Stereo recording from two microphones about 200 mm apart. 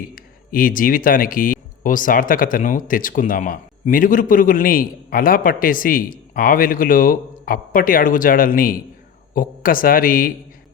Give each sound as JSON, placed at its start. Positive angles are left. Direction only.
{"t": 0.1, "sound": "speech", "side_deg": 45}